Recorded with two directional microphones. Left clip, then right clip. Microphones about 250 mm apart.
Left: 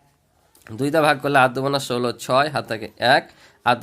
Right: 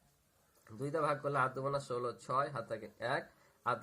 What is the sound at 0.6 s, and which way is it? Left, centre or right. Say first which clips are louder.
Speech: left 18 dB; left.